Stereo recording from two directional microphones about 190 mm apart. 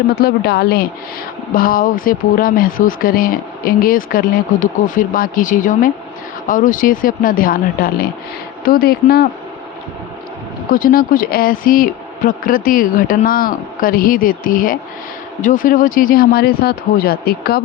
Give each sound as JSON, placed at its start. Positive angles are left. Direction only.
{"t": 0.2, "sound": "a woman's voice", "side_deg": 55}
{"t": 10.7, "sound": "speech", "side_deg": 50}